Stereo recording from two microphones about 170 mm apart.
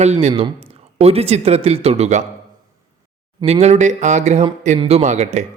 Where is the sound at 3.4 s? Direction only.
40° right (ahead or behind).